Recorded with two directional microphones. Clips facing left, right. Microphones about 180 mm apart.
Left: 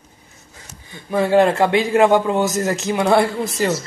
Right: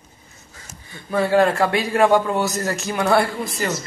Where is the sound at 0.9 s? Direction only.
20° left (ahead or behind).